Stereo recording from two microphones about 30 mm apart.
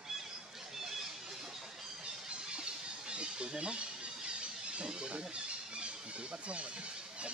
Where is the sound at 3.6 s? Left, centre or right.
Right.